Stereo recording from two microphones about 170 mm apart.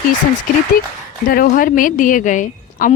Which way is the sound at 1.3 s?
55° left (ahead or behind).